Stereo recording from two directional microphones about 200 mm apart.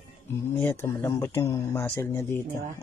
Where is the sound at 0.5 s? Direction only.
10° left (ahead or behind).